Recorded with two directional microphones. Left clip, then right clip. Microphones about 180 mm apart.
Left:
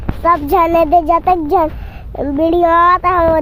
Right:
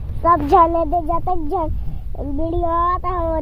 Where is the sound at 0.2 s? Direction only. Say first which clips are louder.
Left 1 dB; 10° left (ahead or behind).